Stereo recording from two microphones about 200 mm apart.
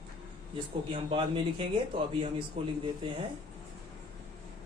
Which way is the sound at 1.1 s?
25° right (ahead or behind).